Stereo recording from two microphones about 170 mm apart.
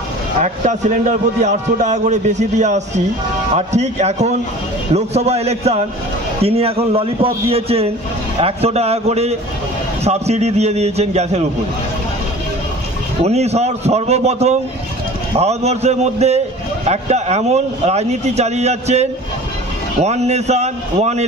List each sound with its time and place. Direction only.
0.4 s a man's voice: 45° right (ahead or behind)
13.2 s a man's voice: 40° right (ahead or behind)